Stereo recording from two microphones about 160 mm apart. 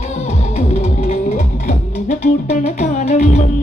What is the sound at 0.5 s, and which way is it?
Music, 45° left (ahead or behind).